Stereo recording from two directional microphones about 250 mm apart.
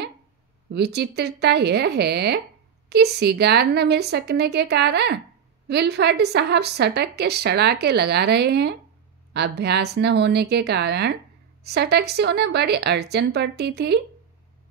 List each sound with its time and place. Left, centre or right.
0.7 s a woman's voice: right